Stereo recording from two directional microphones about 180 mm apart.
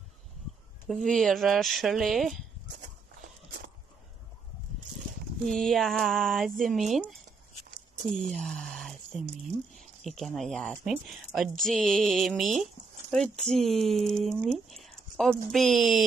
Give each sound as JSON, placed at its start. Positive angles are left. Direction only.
{"t": 0.8, "sound": "speech", "side_deg": 5}
{"t": 5.4, "sound": "speech", "side_deg": 0}